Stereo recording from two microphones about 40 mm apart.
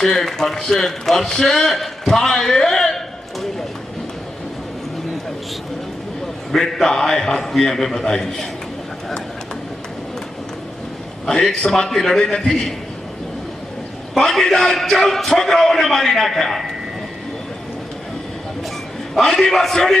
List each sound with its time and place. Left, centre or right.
0.0 s a man's voice: centre
6.5 s a man's voice: centre
11.3 s a man's voice: centre
14.3 s a man's voice: centre
19.1 s a man's voice: centre